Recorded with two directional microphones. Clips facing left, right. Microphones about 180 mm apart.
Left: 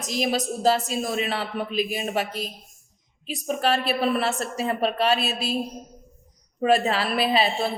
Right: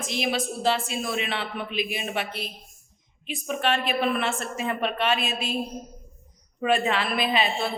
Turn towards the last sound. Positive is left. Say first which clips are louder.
# left 3 dB
turn(degrees=35)  # may be behind; listen again after turning